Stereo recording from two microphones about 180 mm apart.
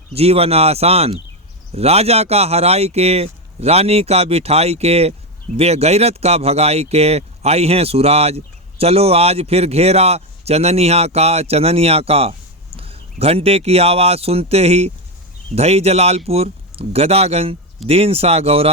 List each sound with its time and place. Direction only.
0.1 s speech: 35° right (ahead or behind)